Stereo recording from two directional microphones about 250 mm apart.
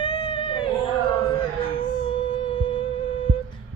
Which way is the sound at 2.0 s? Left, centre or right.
Left.